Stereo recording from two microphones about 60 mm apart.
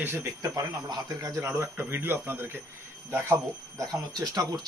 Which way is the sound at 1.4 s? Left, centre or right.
Right.